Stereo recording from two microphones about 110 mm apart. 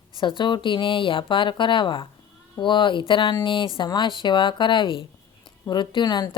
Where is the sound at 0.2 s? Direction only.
45° left (ahead or behind).